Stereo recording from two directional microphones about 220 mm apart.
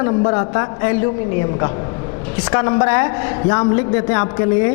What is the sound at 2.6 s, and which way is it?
A woman's voice, 20° left (ahead or behind).